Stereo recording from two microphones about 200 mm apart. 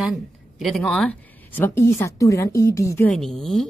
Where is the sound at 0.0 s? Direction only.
Centre (ahead or behind).